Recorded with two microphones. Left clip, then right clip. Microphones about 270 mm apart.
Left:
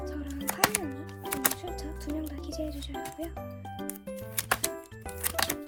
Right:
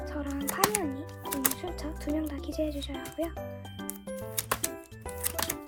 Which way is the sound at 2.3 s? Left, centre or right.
Centre.